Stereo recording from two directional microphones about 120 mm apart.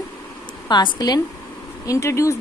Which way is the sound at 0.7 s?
35° left (ahead or behind).